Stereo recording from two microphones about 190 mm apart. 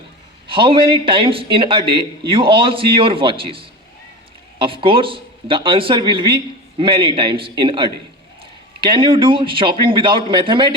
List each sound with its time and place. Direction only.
0.4 s speech: 25° right (ahead or behind)